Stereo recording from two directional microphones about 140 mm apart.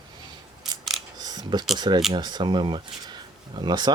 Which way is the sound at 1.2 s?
30° right (ahead or behind).